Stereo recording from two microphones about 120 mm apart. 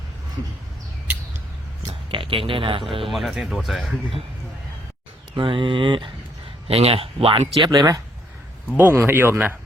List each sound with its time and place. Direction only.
1.9 s a sound: 45° right (ahead or behind)
3.1 s speech: centre (ahead or behind)
5.4 s speech: 45° right (ahead or behind)
6.7 s speech: 55° right (ahead or behind)
7.7 s speech: 30° right (ahead or behind)
8.7 s speech: 15° right (ahead or behind)